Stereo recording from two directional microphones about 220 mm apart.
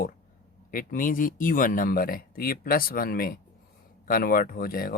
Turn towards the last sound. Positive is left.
turn(degrees=40)  # may be behind; listen again after turning